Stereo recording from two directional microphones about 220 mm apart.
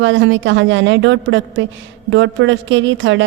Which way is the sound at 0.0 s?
60° right (ahead or behind).